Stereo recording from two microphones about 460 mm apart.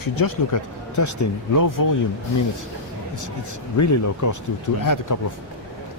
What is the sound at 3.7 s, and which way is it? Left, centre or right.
Speech, left.